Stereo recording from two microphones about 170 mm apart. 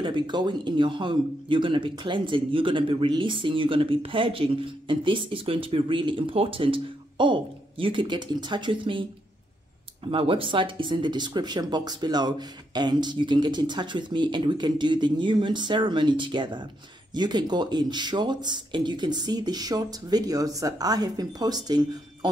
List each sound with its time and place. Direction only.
0.0 s speech: 25° right (ahead or behind)
10.0 s speech: 30° right (ahead or behind)